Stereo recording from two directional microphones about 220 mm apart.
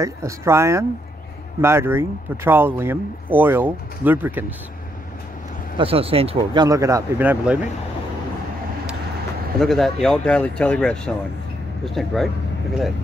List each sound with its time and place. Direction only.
0.0 s speech: 15° right (ahead or behind)
5.8 s speech: 25° right (ahead or behind); by 7.5 s 10° right (ahead or behind)
9.6 s speech: centre (ahead or behind)